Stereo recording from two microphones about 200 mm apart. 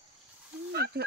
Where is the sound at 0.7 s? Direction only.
55° right (ahead or behind).